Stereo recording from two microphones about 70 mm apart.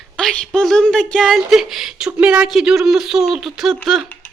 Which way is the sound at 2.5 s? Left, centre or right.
Centre.